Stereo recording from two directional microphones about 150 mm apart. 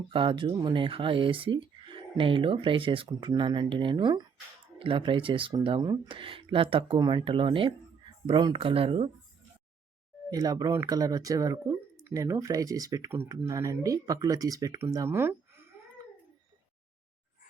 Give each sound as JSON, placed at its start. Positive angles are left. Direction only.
{"t": 0.1, "sound": "speech", "side_deg": -35}
{"t": 10.3, "sound": "speech", "side_deg": -25}